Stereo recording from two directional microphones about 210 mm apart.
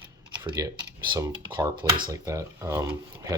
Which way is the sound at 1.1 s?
20° right (ahead or behind).